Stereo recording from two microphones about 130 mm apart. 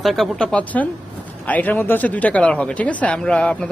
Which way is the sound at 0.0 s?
Centre (ahead or behind).